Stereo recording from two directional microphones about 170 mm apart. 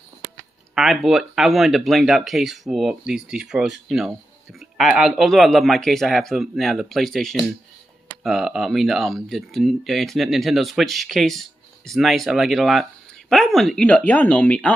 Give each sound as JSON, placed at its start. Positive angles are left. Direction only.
{"t": 0.7, "sound": "speech", "side_deg": 0}